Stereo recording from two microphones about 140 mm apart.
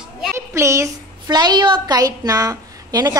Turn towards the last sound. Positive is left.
turn(degrees=-25)  # may be behind; listen again after turning